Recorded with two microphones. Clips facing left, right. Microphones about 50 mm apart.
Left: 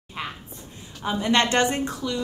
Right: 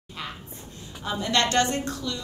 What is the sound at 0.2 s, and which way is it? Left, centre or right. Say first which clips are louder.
A woman's voice: left 3 dB; left.